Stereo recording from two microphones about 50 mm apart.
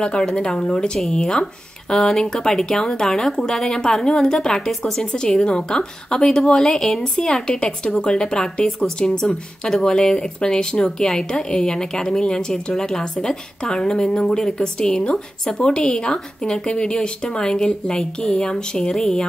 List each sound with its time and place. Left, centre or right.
0.2 s a woman's voice: centre